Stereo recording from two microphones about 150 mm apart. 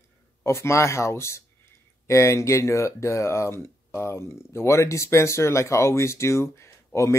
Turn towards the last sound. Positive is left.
turn(degrees=20)  # may be behind; listen again after turning